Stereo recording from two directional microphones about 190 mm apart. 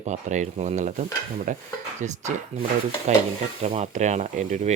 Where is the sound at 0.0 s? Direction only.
40° right (ahead or behind).